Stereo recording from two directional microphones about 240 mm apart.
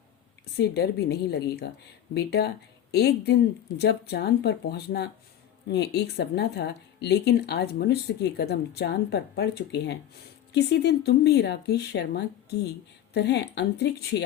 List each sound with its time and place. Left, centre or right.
0.5 s speech: left